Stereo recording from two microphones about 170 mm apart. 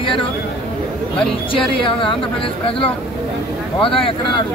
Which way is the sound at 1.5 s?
30° left (ahead or behind).